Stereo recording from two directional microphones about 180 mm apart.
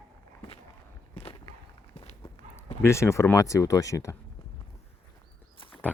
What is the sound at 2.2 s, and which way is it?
Speech, 15° left (ahead or behind).